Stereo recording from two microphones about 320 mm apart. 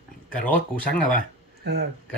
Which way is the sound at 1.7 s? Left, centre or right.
Right.